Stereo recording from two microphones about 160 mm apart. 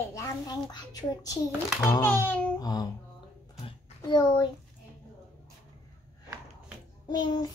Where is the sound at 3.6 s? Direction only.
25° left (ahead or behind).